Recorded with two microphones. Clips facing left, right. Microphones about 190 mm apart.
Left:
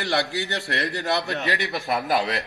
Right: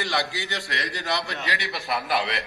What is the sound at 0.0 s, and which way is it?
Speech, 60° left (ahead or behind).